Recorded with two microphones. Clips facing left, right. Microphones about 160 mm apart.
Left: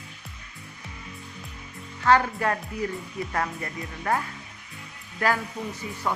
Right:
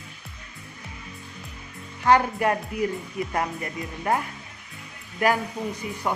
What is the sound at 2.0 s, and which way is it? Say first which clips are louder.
Speech: right 2 dB; 15° right (ahead or behind).